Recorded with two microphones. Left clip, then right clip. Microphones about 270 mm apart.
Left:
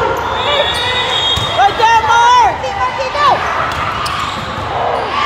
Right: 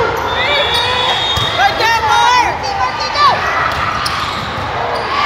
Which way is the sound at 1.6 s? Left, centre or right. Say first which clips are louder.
Left 4 dB; left.